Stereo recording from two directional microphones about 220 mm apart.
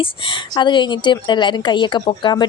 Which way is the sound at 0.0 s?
20° left (ahead or behind).